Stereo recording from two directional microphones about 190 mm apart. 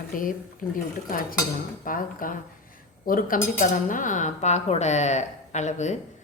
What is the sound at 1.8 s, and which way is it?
A woman's voice, 45° left (ahead or behind).